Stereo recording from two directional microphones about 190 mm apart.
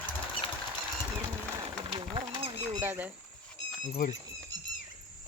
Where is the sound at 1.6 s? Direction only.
30° right (ahead or behind).